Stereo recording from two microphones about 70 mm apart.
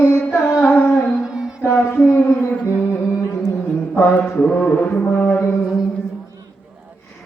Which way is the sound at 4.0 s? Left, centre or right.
Left.